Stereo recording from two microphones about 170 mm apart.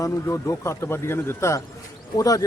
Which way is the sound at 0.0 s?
15° left (ahead or behind).